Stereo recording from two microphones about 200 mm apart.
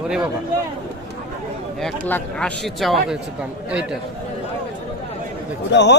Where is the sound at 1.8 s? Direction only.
5° left (ahead or behind).